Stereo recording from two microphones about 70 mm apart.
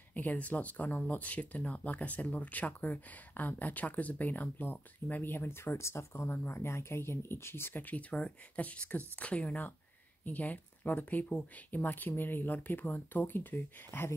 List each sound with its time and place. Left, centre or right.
0.1 s speech: left